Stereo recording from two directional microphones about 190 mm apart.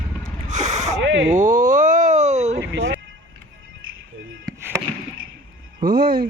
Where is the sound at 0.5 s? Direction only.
40° right (ahead or behind).